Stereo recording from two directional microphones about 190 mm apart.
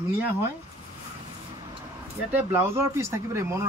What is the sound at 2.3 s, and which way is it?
Speech, 10° right (ahead or behind).